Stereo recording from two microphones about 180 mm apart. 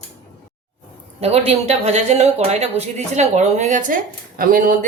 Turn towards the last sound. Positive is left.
turn(degrees=-45)  # may be behind; listen again after turning